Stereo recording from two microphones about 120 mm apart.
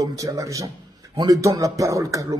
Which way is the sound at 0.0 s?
30° right (ahead or behind).